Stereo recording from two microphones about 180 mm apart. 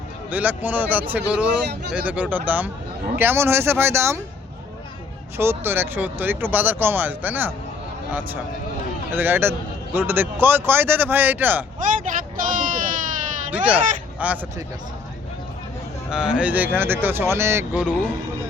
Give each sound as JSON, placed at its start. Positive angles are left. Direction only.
{"t": 0.3, "sound": "a man's voice", "side_deg": -10}
{"t": 5.4, "sound": "a man's voice", "side_deg": -10}
{"t": 9.1, "sound": "a man's voice", "side_deg": -10}
{"t": 11.9, "sound": "a sound", "side_deg": -50}
{"t": 13.5, "sound": "speech", "side_deg": -10}
{"t": 16.0, "sound": "a man's voice", "side_deg": -5}